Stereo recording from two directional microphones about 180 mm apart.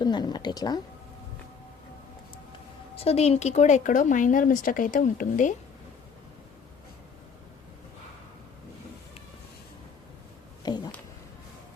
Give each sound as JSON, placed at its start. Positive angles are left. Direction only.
{"t": 0.0, "sound": "a woman's voice", "side_deg": 25}
{"t": 2.9, "sound": "speech", "side_deg": 35}
{"t": 10.6, "sound": "a sound", "side_deg": 25}